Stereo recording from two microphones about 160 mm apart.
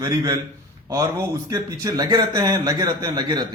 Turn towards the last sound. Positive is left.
turn(degrees=-25)  # may be behind; listen again after turning